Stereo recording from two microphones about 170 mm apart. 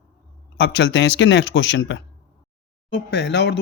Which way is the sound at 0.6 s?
90° left.